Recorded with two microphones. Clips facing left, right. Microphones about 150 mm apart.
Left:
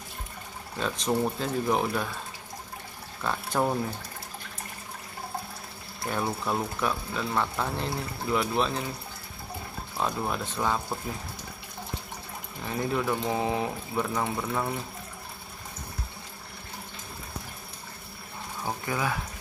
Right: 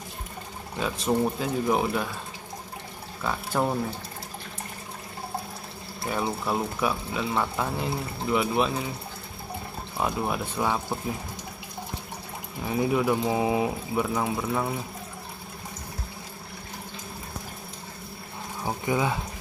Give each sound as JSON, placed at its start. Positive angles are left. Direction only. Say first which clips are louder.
{"t": 0.7, "sound": "speech", "louder": "right 2 dB", "side_deg": -5}
{"t": 3.3, "sound": "speech", "louder": "right 1 dB", "side_deg": 0}
{"t": 6.0, "sound": "speech", "louder": "right 1 dB", "side_deg": 0}
{"t": 9.9, "sound": "speech", "louder": "right 2 dB", "side_deg": -10}
{"t": 12.6, "sound": "speech", "louder": "right 4 dB", "side_deg": -10}
{"t": 18.6, "sound": "a sound", "louder": "right 4 dB", "side_deg": -15}